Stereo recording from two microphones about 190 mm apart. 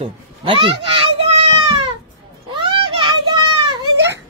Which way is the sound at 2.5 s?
25° right (ahead or behind).